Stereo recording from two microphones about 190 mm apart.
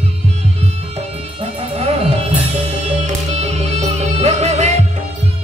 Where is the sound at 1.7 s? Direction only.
30° right (ahead or behind).